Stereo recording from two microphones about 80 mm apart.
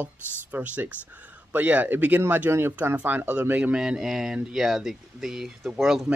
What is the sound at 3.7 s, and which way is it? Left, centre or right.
Speech, centre.